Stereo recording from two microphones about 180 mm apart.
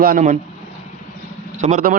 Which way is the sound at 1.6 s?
40° right (ahead or behind).